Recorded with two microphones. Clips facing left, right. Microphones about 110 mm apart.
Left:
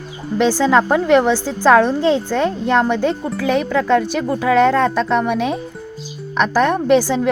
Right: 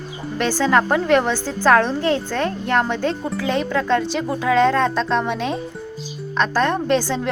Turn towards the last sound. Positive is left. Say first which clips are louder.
# left 5 dB
turn(degrees=10)  # may be behind; listen again after turning